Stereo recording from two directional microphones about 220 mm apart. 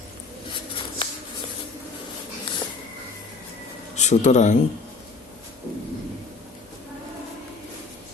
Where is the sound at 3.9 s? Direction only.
30° left (ahead or behind).